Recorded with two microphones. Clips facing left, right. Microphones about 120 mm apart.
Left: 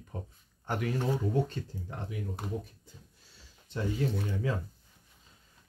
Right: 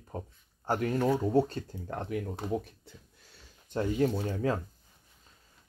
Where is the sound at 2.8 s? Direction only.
55° right (ahead or behind).